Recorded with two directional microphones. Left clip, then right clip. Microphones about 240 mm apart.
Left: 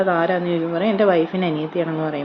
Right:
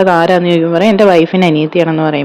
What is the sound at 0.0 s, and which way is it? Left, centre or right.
Speech, right.